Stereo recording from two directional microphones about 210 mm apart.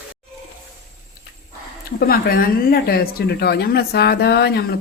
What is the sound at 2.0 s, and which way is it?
Speech, 45° left (ahead or behind).